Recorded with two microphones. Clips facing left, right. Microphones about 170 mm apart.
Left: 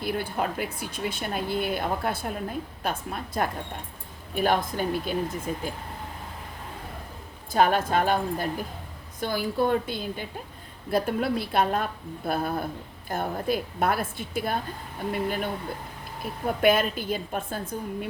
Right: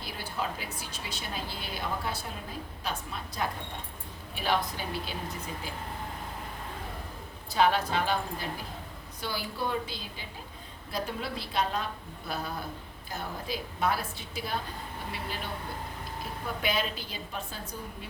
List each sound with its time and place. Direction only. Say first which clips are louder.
0.0 s a woman's voice: left 7 dB; 55° left (ahead or behind)
7.5 s a woman's voice: left 4 dB; 50° left (ahead or behind)
16.6 s a woman's voice: left 10 dB; 55° left (ahead or behind)